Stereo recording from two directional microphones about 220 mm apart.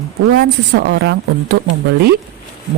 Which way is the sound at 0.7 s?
50° right (ahead or behind).